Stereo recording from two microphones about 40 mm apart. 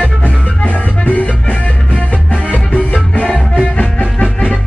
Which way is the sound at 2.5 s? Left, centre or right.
Left.